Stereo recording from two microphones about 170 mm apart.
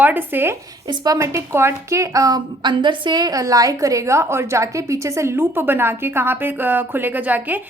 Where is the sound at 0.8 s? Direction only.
25° right (ahead or behind).